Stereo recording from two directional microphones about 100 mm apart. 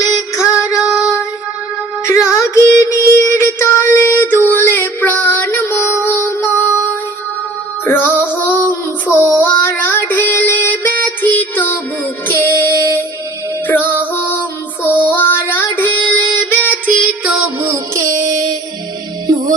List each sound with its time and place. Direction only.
0.0 s music: 35° left (ahead or behind)
0.8 s female singing: 5° right (ahead or behind)
2.0 s music: 30° left (ahead or behind)
7.9 s child singing: 20° left (ahead or behind)
12.3 s music: 25° left (ahead or behind)
14.8 s child singing: 20° left (ahead or behind)
17.6 s music: 30° right (ahead or behind)